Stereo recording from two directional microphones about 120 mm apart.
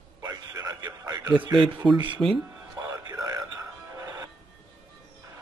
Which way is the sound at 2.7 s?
30° right (ahead or behind).